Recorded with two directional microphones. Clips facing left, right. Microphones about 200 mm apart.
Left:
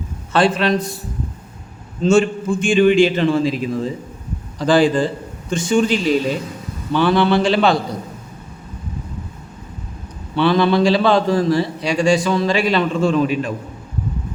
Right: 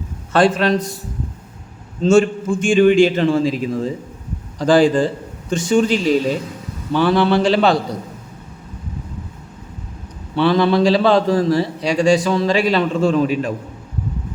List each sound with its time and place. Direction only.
0.3 s a man's voice: 45° right (ahead or behind)
10.3 s a man's voice: 35° right (ahead or behind)